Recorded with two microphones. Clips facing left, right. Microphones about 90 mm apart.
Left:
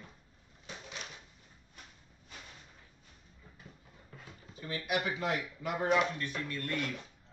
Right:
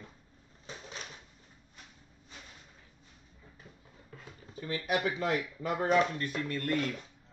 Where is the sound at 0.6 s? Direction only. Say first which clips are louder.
Right 1 dB; 35° right (ahead or behind).